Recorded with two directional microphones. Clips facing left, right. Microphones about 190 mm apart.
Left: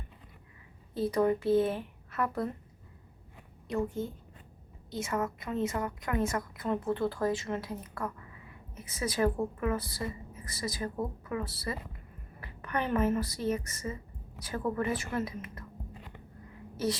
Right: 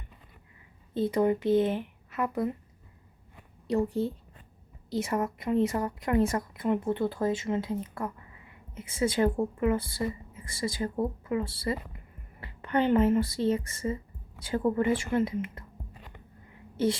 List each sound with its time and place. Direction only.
0.9 s a woman's voice: 25° right (ahead or behind)
3.7 s a woman's voice: 35° right (ahead or behind)
16.7 s a woman's voice: 25° right (ahead or behind)